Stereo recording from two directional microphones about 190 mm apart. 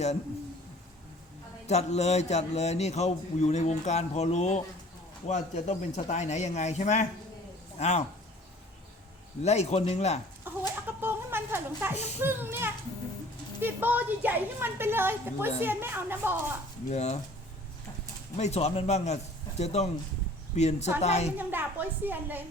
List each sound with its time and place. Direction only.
1.6 s a man's voice: 35° left (ahead or behind)
9.4 s a man's voice: 35° left (ahead or behind)
10.5 s chicken: 10° right (ahead or behind)
10.8 s a sound: 10° right (ahead or behind)
11.9 s a man's voice: 35° left (ahead or behind)
12.2 s a sound: 10° right (ahead or behind)
13.6 s a woman's voice: 10° right (ahead or behind)
16.9 s a man's voice: 35° left (ahead or behind)
18.3 s a man's voice: 35° left (ahead or behind)
21.3 s a woman's voice: 10° right (ahead or behind)